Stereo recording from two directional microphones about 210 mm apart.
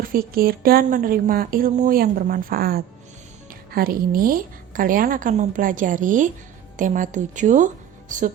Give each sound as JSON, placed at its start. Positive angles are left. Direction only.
{"t": 0.0, "sound": "a woman's voice", "side_deg": -45}